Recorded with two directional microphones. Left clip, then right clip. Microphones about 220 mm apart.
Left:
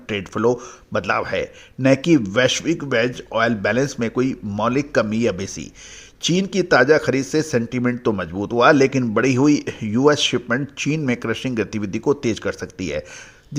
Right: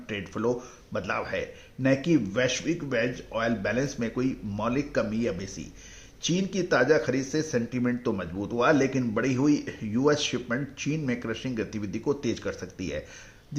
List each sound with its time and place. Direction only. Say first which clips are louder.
0.1 s speech: left 9 dB; 40° left (ahead or behind)